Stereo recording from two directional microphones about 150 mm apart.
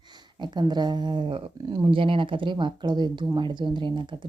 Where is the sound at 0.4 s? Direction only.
30° right (ahead or behind).